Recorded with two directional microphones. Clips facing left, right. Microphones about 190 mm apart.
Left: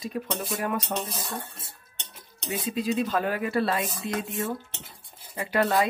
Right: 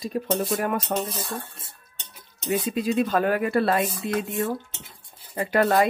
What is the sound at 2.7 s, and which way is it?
Speech, 55° right (ahead or behind).